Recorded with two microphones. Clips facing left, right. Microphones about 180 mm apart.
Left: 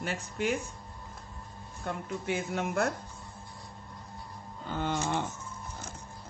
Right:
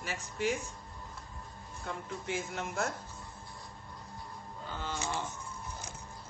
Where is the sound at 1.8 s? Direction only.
60° left (ahead or behind).